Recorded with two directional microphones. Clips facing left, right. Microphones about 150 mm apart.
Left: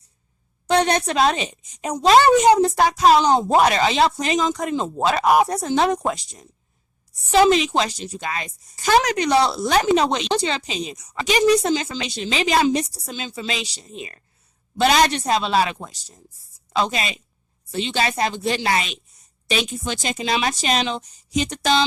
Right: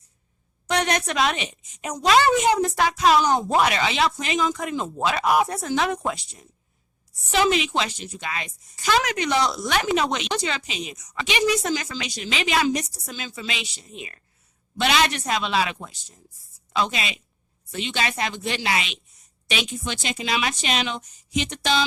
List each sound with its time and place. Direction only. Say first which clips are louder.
0.7 s a woman's voice: left 5 dB; 30° left (ahead or behind)